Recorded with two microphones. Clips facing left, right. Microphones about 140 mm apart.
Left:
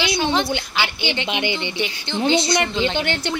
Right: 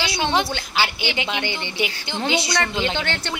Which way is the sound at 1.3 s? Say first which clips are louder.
Left 3 dB; 15° left (ahead or behind).